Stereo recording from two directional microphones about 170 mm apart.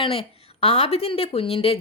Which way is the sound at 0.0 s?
35° left (ahead or behind).